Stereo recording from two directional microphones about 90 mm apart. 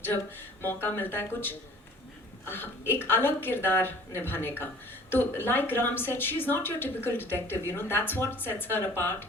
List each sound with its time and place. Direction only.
0.6 s a woman's voice: 25° left (ahead or behind)